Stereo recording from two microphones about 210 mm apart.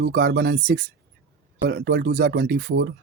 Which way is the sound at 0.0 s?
50° right (ahead or behind).